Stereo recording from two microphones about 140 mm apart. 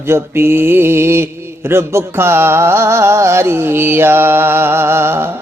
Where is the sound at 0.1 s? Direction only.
15° right (ahead or behind).